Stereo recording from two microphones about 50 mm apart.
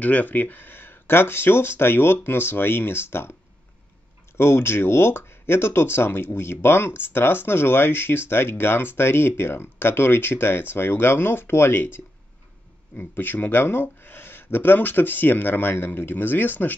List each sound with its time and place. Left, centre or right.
0.0 s speech: left
4.4 s speech: left